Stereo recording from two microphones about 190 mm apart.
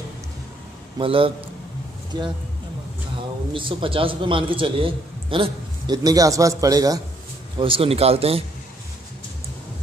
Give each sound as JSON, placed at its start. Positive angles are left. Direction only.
{"t": 0.9, "sound": "a man's voice", "side_deg": -30}
{"t": 3.5, "sound": "a man's voice", "side_deg": -25}